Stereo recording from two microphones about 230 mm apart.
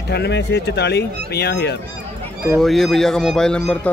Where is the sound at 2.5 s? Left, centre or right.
Centre.